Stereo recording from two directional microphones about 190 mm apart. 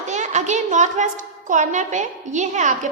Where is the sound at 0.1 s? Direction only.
40° right (ahead or behind).